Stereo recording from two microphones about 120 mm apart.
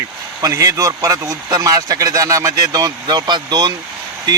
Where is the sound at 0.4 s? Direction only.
30° right (ahead or behind).